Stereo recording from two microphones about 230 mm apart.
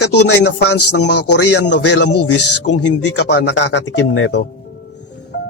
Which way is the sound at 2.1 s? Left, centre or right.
Left.